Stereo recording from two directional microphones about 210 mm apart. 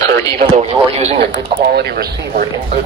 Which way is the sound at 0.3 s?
30° right (ahead or behind).